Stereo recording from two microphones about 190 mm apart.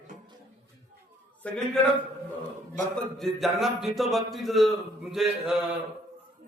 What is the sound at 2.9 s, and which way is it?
A man's voice, centre (ahead or behind).